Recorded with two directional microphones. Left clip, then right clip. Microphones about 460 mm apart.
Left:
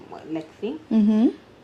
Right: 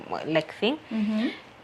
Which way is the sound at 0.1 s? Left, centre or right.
Right.